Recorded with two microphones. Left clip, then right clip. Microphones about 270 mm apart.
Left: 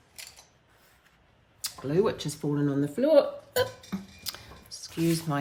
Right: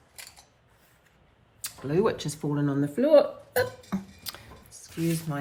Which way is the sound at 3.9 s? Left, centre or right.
Centre.